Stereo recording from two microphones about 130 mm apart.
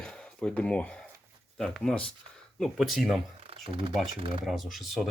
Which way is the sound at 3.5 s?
45° right (ahead or behind).